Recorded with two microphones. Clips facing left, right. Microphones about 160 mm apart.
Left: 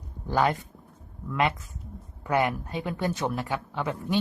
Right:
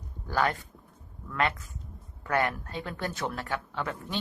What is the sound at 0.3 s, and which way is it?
Speech, 15° left (ahead or behind).